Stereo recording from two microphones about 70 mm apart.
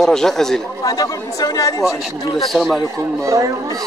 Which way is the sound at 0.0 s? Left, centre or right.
Centre.